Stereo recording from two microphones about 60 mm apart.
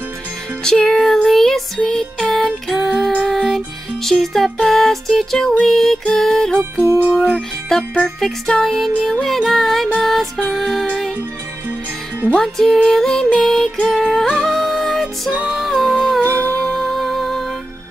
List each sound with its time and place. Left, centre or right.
0.7 s music: centre
4.0 s music: centre
6.6 s music: right
7.7 s music: centre
12.4 s music: centre
16.2 s music: left
16.6 s music: centre